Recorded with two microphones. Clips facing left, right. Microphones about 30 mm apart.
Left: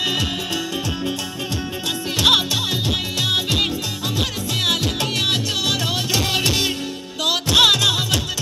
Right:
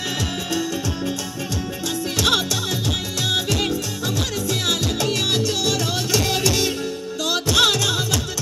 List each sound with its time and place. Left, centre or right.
0.0 s music: left
2.1 s music: left